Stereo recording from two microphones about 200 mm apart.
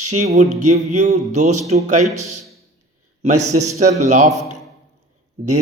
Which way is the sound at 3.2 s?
35° right (ahead or behind).